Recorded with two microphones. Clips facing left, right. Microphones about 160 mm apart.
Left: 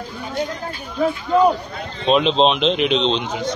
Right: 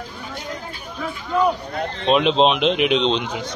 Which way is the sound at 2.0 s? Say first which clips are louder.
Left 1 dB; 5° right (ahead or behind).